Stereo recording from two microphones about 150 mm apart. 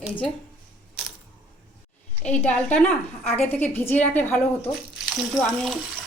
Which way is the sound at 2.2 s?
10° left (ahead or behind).